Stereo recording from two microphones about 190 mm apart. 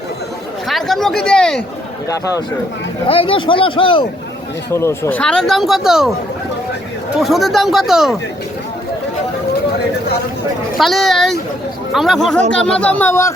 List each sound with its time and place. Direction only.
0.7 s speech: centre (ahead or behind)
3.1 s speech: 30° left (ahead or behind)
4.7 s speech: 15° left (ahead or behind); by 6.1 s centre (ahead or behind)
7.2 s speech: centre (ahead or behind)
10.8 s speech: centre (ahead or behind)